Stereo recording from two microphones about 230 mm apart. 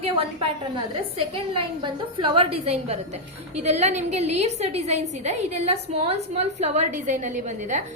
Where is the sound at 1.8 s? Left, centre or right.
Right.